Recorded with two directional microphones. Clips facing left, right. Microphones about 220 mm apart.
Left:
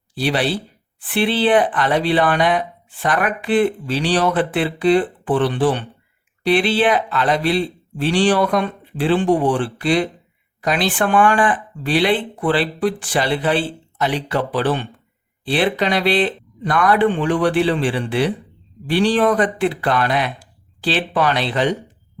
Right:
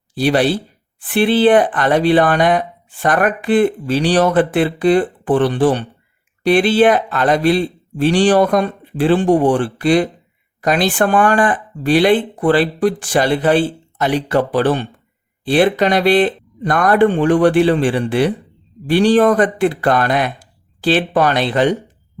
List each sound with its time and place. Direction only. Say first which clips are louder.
0.1 s speech: right 5 dB; 45° right (ahead or behind)